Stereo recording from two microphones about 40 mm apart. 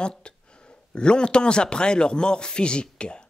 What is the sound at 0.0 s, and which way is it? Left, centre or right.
Speech, left.